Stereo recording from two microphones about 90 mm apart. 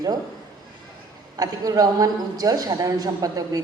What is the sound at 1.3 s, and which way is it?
A man's voice, 45° right (ahead or behind).